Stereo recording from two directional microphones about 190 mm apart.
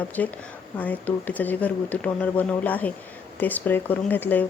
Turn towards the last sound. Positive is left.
turn(degrees=10)  # may be behind; listen again after turning